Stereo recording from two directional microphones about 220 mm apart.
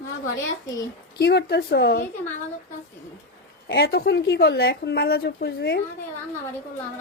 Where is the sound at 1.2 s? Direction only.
50° left (ahead or behind).